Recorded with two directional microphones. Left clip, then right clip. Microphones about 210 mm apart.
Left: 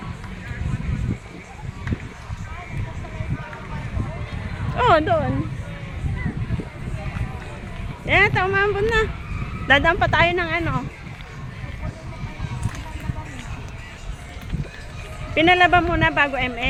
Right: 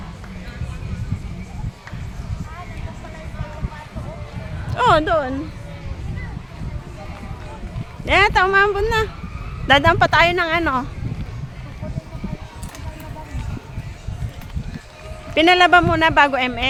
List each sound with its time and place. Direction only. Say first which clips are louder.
4.7 s a sound: right 2 dB; centre (ahead or behind)
8.0 s a man's voice: right 3 dB; 10° right (ahead or behind)
15.4 s a man's voice: right 3 dB; 15° right (ahead or behind)